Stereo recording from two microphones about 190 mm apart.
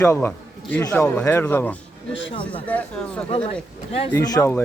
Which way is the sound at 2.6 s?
5° left (ahead or behind).